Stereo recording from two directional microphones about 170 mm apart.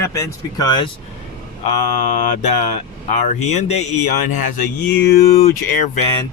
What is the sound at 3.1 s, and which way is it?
Speech, 40° left (ahead or behind).